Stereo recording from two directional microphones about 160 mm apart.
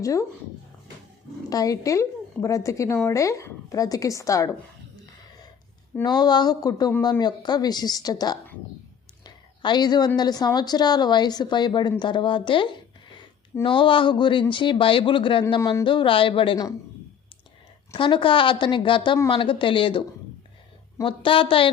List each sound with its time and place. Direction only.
0.0 s a woman's voice: 20° left (ahead or behind)
1.5 s a woman's voice: 20° left (ahead or behind)
6.0 s a woman's voice: 25° left (ahead or behind)
9.2 s a sound: 30° left (ahead or behind)
10.2 s a woman's voice: 25° left (ahead or behind)
17.9 s a woman's voice: 30° left (ahead or behind)